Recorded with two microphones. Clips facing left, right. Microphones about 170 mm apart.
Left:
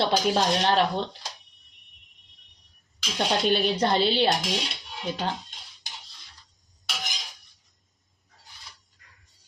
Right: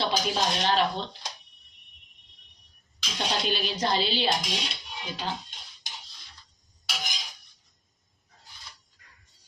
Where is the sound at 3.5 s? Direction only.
55° left (ahead or behind).